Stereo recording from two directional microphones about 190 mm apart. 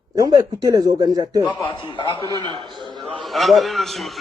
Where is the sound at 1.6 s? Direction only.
25° left (ahead or behind).